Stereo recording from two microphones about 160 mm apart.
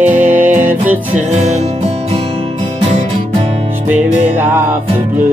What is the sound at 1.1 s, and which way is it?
Music, 45° right (ahead or behind).